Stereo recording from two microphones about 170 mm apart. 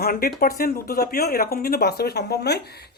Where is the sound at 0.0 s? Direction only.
65° left (ahead or behind).